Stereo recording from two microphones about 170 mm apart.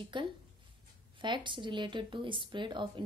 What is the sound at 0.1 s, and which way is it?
Speech, 30° right (ahead or behind).